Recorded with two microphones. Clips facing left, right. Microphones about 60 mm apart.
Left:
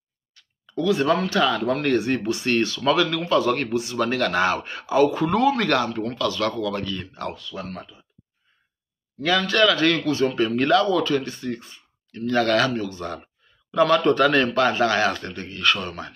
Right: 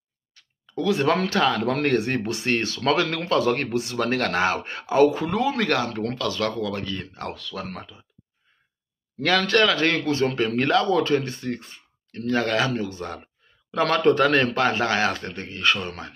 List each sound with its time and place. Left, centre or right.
0.3 s a sound: right
1.0 s speech: right
1.3 s speech: right
2.4 s speech: right
5.5 s speech: right
5.9 s speech: right
7.3 s speech: right
9.5 s speech: right
12.3 s speech: right